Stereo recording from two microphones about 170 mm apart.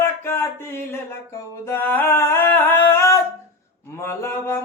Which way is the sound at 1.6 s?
15° left (ahead or behind).